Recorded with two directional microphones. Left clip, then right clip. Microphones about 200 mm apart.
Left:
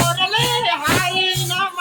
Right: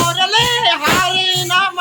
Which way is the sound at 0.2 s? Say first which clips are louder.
Right 4 dB; 25° right (ahead or behind).